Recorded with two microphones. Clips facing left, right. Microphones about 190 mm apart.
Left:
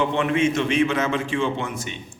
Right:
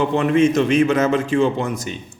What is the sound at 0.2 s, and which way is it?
Speech, 40° right (ahead or behind).